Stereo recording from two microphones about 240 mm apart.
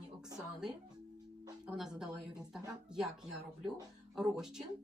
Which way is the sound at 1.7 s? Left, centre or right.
Centre.